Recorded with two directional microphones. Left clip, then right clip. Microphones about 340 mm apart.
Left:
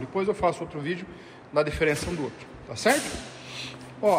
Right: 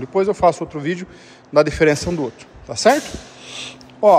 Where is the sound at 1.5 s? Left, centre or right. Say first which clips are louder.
Right 10 dB; right.